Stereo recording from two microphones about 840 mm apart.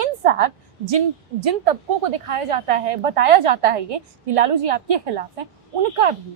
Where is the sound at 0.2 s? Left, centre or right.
Right.